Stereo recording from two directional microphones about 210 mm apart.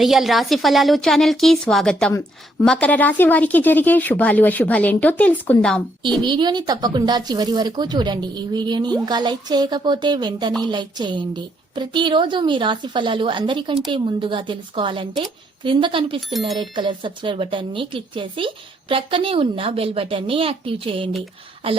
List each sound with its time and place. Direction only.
0.0 s a woman's voice: centre (ahead or behind)
6.2 s speech: 20° right (ahead or behind)